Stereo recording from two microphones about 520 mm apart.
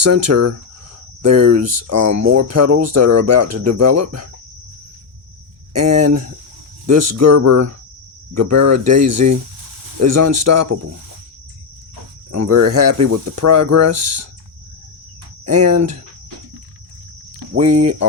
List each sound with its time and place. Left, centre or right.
0.0 s speech: right
5.7 s speech: right
12.3 s speech: right
15.4 s speech: right
17.7 s speech: centre